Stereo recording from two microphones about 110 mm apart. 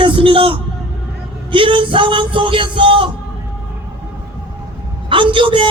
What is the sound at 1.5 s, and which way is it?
Speech, 50° right (ahead or behind).